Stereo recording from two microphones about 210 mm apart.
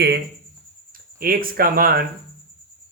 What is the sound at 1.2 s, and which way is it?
Speech, 45° right (ahead or behind).